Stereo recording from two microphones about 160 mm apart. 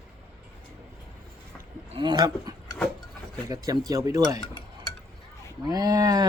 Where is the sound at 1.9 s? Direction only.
30° right (ahead or behind).